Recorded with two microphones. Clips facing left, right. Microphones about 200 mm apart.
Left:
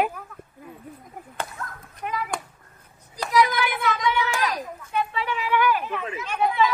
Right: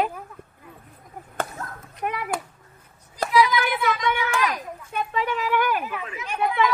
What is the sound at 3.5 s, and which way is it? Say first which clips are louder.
Speech: right 2 dB; 50° right (ahead or behind).